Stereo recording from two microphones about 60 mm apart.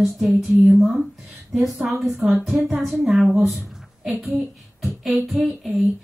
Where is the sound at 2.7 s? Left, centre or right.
Centre.